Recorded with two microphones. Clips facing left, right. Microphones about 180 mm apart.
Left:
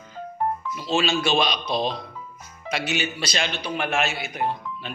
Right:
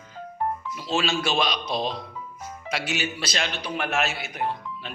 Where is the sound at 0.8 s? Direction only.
5° right (ahead or behind).